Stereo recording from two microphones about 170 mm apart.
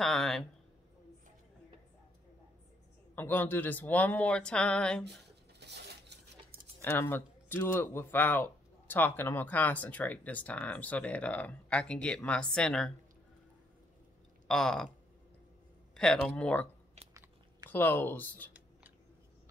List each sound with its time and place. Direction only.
0.0 s speech: centre (ahead or behind)
3.2 s speech: 10° left (ahead or behind)
5.6 s a sound: 80° right
6.8 s speech: 15° left (ahead or behind)
14.5 s speech: 5° left (ahead or behind)
16.0 s speech: 5° left (ahead or behind)
17.6 s speech: 10° left (ahead or behind)